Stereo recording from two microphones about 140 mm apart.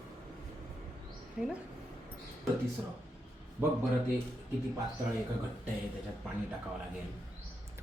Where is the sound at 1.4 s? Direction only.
5° right (ahead or behind).